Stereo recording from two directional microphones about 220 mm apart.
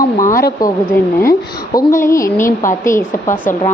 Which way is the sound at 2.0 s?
15° left (ahead or behind).